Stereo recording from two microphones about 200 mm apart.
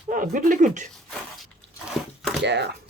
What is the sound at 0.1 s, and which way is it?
Speech, 40° right (ahead or behind).